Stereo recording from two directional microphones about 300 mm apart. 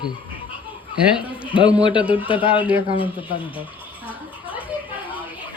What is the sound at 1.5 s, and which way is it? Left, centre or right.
Speech, centre.